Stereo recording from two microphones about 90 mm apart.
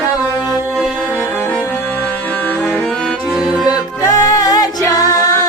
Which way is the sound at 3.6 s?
45° left (ahead or behind).